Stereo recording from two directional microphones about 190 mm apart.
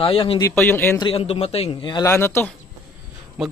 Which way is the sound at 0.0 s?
30° left (ahead or behind).